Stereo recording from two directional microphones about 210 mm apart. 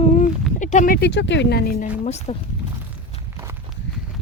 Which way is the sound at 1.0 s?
55° left (ahead or behind).